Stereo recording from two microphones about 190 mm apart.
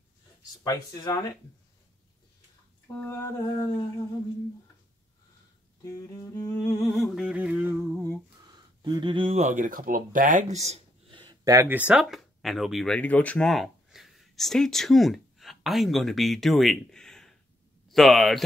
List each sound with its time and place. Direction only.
0.7 s speech: 20° left (ahead or behind)
3.0 s music: 10° left (ahead or behind)
5.8 s music: 15° left (ahead or behind)
6.8 s humming: centre (ahead or behind)
8.5 s speech: 20° right (ahead or behind); by 18.4 s centre (ahead or behind)